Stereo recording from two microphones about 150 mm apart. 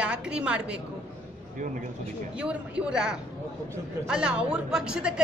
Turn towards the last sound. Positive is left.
turn(degrees=-5)  # may be behind; listen again after turning